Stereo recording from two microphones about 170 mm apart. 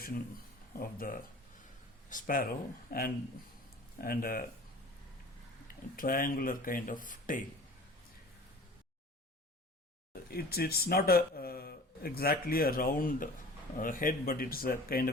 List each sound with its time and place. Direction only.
0.8 s speech: 55° left (ahead or behind)
6.0 s speech: 55° left (ahead or behind)
10.1 s speech: 65° left (ahead or behind)